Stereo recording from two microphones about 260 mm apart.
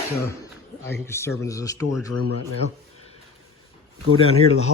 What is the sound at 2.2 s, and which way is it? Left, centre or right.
Speech, right.